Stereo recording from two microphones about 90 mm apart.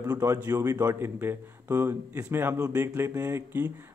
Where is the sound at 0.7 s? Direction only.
40° right (ahead or behind).